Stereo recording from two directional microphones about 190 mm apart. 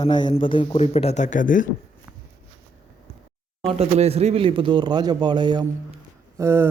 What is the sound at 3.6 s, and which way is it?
Speech, 30° right (ahead or behind).